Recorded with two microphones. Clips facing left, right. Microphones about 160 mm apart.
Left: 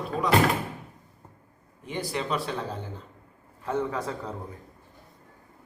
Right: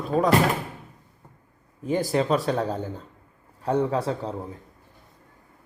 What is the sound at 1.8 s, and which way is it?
Speech, 40° right (ahead or behind).